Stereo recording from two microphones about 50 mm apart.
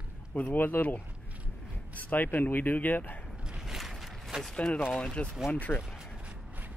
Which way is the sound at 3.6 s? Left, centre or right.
Centre.